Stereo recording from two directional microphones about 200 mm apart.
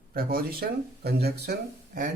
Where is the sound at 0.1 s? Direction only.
50° right (ahead or behind).